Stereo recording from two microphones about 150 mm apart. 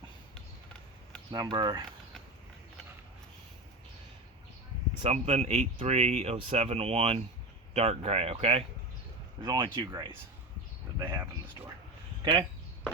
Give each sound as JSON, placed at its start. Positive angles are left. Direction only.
{"t": 1.3, "sound": "speech", "side_deg": -25}
{"t": 5.0, "sound": "speech", "side_deg": -45}
{"t": 9.4, "sound": "speech", "side_deg": -30}
{"t": 12.2, "sound": "speech", "side_deg": -30}